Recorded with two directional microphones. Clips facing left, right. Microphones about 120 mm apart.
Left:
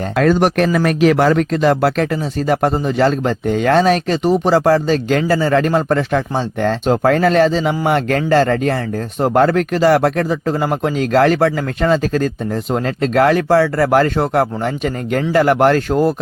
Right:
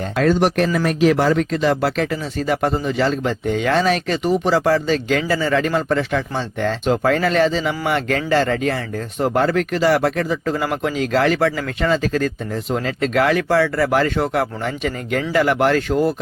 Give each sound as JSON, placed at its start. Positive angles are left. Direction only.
{"t": 0.2, "sound": "speech", "side_deg": 55}